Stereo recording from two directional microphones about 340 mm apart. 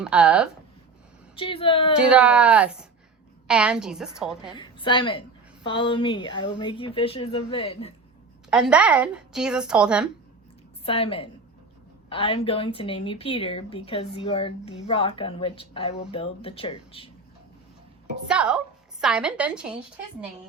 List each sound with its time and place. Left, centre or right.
0.0 s a woman's voice: centre
1.4 s a woman's voice: centre
2.0 s a woman's voice: centre
4.5 s a woman's voice: centre
8.4 s a woman's voice: centre
10.8 s a woman's voice: centre
18.3 s a woman's voice: centre